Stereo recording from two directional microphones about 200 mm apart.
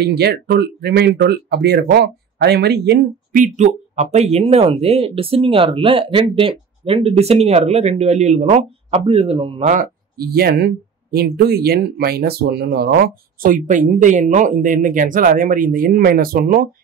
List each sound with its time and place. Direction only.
0.0 s speech: 55° right (ahead or behind)
3.3 s speech: 35° right (ahead or behind)